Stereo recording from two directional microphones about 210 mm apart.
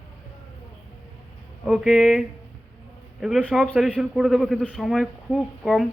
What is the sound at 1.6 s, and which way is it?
A man's voice, centre (ahead or behind).